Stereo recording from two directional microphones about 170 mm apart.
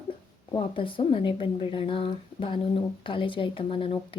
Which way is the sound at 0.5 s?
30° left (ahead or behind).